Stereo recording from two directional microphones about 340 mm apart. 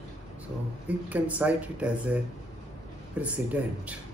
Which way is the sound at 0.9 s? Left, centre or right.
Centre.